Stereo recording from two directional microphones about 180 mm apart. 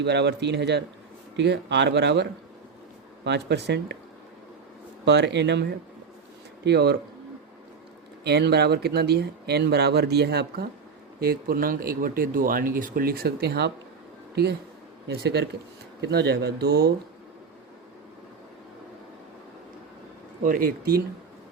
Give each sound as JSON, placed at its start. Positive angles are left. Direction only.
{"t": 0.0, "sound": "speech", "side_deg": -70}
{"t": 3.2, "sound": "speech", "side_deg": -65}
{"t": 5.0, "sound": "speech", "side_deg": -70}
{"t": 6.7, "sound": "speech", "side_deg": -65}
{"t": 8.2, "sound": "speech", "side_deg": -65}
{"t": 11.2, "sound": "speech", "side_deg": -55}
{"t": 15.0, "sound": "speech", "side_deg": -65}
{"t": 20.4, "sound": "speech", "side_deg": -50}